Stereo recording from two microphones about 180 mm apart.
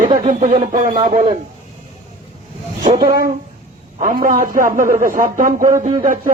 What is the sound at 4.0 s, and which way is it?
Speech, 50° right (ahead or behind).